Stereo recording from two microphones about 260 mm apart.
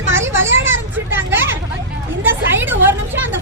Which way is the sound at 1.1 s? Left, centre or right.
Centre.